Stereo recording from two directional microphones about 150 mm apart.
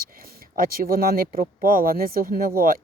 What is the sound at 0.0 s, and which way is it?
Speech, 75° right (ahead or behind).